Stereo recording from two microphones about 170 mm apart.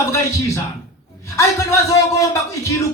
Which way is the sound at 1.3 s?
20° left (ahead or behind).